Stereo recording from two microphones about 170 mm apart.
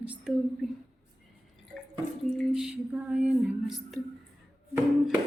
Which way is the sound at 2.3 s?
5° right (ahead or behind).